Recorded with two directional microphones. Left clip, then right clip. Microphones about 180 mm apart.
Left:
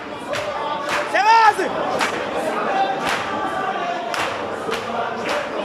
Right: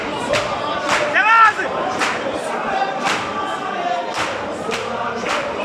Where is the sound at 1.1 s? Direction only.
30° left (ahead or behind).